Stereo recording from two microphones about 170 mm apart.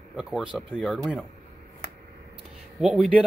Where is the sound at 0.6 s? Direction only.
10° left (ahead or behind).